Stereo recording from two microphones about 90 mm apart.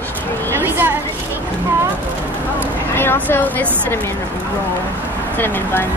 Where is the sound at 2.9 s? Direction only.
25° left (ahead or behind).